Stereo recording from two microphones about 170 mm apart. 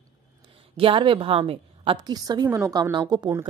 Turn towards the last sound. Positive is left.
turn(degrees=-20)  # may be behind; listen again after turning